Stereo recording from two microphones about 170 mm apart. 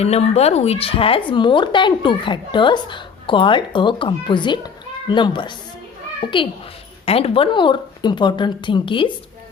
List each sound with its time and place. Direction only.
0.0 s speech: 40° left (ahead or behind)